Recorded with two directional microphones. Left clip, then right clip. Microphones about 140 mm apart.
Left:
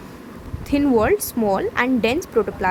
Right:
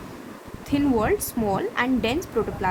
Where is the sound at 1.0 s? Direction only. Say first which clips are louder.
Left 5 dB; 35° left (ahead or behind).